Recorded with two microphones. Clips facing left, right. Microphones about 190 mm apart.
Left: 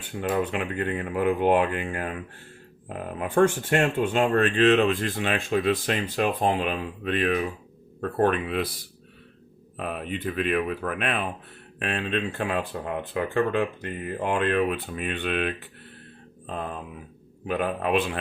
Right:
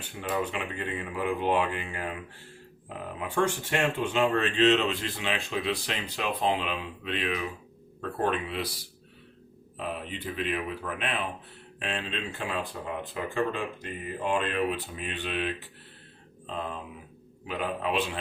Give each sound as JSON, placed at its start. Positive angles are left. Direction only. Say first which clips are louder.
{"t": 0.2, "sound": "speech", "louder": "left 5 dB", "side_deg": 60}
{"t": 9.7, "sound": "speech", "louder": "left 4 dB", "side_deg": 55}
{"t": 17.4, "sound": "speech", "louder": "left 5 dB", "side_deg": 55}